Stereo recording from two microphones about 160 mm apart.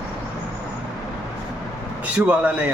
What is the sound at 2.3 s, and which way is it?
Speech, 10° right (ahead or behind).